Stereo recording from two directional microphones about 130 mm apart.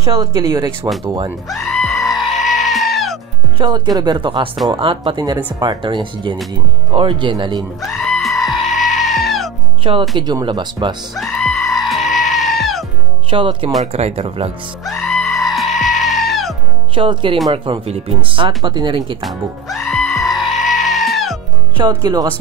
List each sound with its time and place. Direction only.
0.4 s speech: 30° right (ahead or behind)
1.5 s goat: centre (ahead or behind)
3.5 s speech: 35° right (ahead or behind)
7.8 s goat: centre (ahead or behind)
10.1 s speech: 35° right (ahead or behind)
11.1 s music: 5° left (ahead or behind)
13.3 s speech: 40° right (ahead or behind)
13.9 s speech: 55° right (ahead or behind)
14.2 s speech: 45° right (ahead or behind)
14.9 s music: centre (ahead or behind)
16.9 s speech: 40° right (ahead or behind)
19.2 s music: centre (ahead or behind)
21.7 s speech: 30° right (ahead or behind)